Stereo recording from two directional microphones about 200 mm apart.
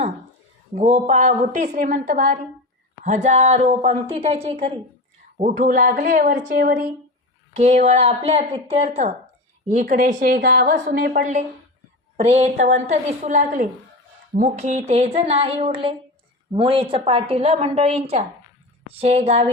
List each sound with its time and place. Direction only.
0.8 s speech: 35° right (ahead or behind)
5.4 s a woman's voice: 40° right (ahead or behind)